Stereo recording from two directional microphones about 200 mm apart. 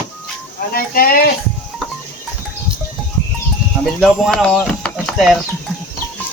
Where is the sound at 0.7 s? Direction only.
45° left (ahead or behind).